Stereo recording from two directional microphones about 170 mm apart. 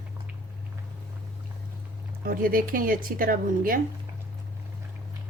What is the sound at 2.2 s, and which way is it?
Speech, 55° right (ahead or behind).